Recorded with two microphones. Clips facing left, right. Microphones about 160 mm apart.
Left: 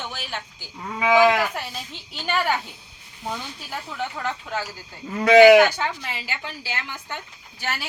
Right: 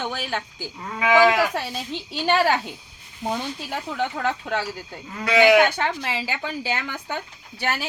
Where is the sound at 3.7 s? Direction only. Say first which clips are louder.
Right 3 dB; 75° right (ahead or behind).